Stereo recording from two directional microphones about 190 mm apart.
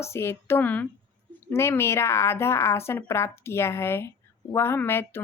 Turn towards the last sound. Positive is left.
turn(degrees=10)  # may be behind; listen again after turning